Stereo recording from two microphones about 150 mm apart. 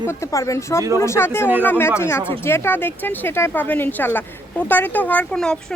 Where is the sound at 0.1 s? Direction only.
20° left (ahead or behind).